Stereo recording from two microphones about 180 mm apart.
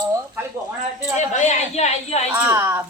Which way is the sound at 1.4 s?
40° left (ahead or behind).